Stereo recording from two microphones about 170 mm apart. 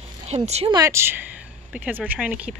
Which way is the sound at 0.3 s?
35° right (ahead or behind).